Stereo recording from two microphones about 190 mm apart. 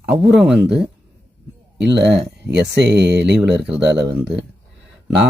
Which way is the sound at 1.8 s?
65° right (ahead or behind).